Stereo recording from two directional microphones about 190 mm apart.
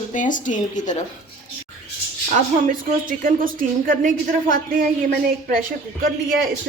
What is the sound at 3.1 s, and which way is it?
A woman's voice, 45° right (ahead or behind).